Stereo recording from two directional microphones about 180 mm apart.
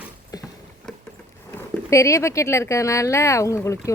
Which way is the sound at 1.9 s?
15° left (ahead or behind).